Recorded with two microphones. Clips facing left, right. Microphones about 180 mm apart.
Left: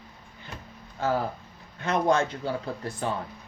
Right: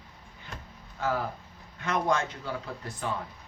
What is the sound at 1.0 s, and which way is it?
Speech, 30° left (ahead or behind).